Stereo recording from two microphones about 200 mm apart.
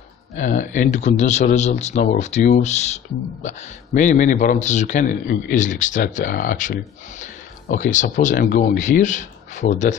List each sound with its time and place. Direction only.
0.4 s a man's voice: 40° left (ahead or behind)